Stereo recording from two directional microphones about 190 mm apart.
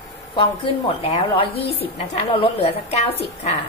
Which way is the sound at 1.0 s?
30° left (ahead or behind).